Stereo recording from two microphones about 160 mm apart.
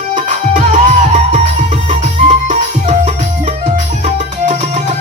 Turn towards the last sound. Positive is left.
turn(degrees=-45)  # may be behind; listen again after turning